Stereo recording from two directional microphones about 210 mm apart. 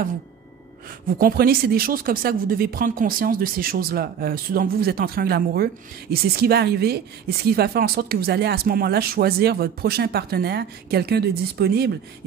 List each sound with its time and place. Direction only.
1.1 s speech: 45° right (ahead or behind)